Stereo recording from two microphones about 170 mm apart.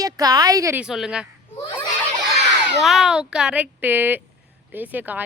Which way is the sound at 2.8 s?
Centre (ahead or behind).